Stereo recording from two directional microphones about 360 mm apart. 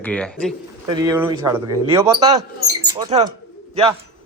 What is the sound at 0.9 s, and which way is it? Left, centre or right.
A man's voice, centre.